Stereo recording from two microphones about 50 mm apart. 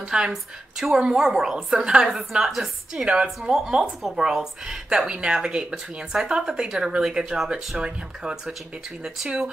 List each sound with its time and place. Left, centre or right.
0.1 s a woman's voice: centre